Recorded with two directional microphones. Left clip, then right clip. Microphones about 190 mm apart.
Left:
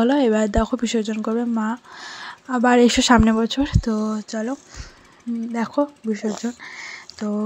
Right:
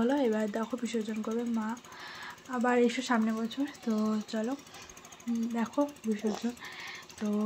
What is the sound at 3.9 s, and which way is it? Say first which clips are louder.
Speech: left 8 dB; 30° left (ahead or behind).